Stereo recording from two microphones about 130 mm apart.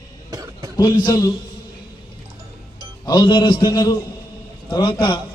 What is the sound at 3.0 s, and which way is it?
A man's voice, 35° left (ahead or behind).